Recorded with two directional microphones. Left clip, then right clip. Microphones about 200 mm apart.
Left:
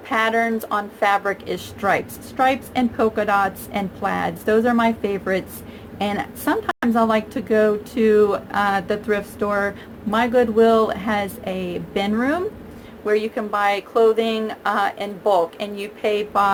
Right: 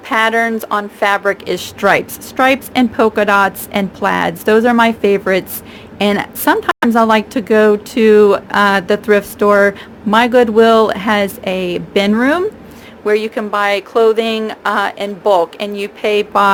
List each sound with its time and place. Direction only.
0.1 s a woman's voice: 55° right (ahead or behind)